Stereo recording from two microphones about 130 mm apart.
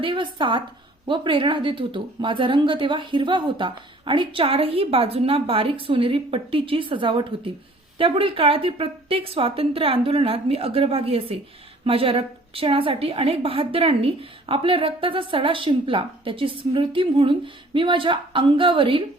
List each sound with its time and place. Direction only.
0.0 s a woman's voice: 40° right (ahead or behind)